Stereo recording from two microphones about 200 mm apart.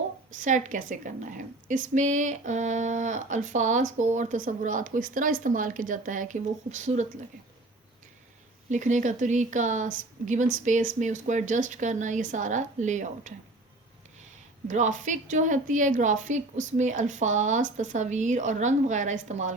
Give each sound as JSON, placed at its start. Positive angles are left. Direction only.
{"t": 0.3, "sound": "a woman's voice", "side_deg": -40}
{"t": 8.7, "sound": "a woman's voice", "side_deg": -40}
{"t": 14.7, "sound": "a woman's voice", "side_deg": -40}